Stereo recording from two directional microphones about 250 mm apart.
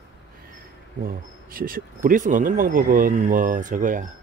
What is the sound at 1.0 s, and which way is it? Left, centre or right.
A man's voice, right.